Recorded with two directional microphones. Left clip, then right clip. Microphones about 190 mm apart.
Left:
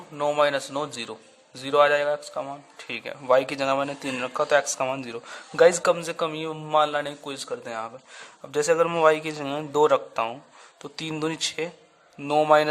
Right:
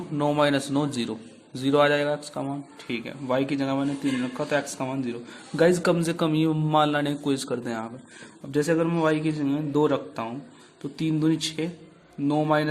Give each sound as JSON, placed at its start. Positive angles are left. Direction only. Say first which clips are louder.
{"t": 0.2, "sound": "a man's voice", "louder": "left 1 dB", "side_deg": 10}
{"t": 8.5, "sound": "speech", "louder": "left 2 dB", "side_deg": 25}